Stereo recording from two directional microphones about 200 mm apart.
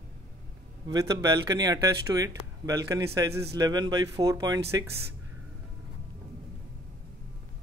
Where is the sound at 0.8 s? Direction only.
20° right (ahead or behind).